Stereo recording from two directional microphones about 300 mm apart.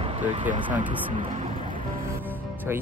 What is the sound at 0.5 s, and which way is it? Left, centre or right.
Speech, right.